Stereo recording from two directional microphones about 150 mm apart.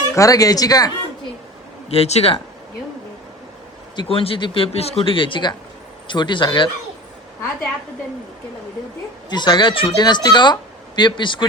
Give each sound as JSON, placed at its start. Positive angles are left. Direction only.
{"t": 0.1, "sound": "speech", "side_deg": 20}
{"t": 1.9, "sound": "speech", "side_deg": 45}
{"t": 3.9, "sound": "speech", "side_deg": 40}
{"t": 9.3, "sound": "speech", "side_deg": 30}